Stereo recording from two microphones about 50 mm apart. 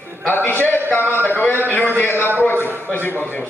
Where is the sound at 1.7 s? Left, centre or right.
Left.